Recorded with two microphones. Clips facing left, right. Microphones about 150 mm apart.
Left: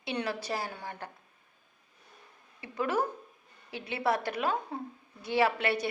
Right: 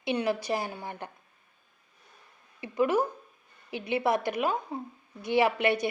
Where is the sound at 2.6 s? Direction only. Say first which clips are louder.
Right 5 dB; 15° right (ahead or behind).